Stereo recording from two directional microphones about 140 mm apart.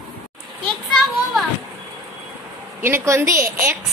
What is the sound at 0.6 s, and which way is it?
Children playing, 5° left (ahead or behind).